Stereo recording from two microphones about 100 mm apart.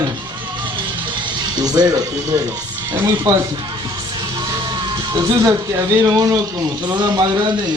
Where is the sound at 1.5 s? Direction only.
40° right (ahead or behind).